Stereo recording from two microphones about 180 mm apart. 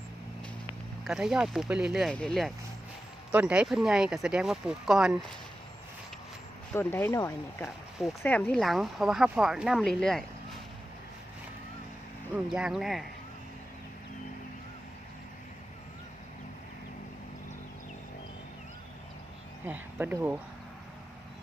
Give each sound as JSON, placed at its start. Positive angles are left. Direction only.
{"t": 1.0, "sound": "speech", "side_deg": -5}
{"t": 6.7, "sound": "speech", "side_deg": 15}
{"t": 12.3, "sound": "speech", "side_deg": -5}
{"t": 19.6, "sound": "speech", "side_deg": -10}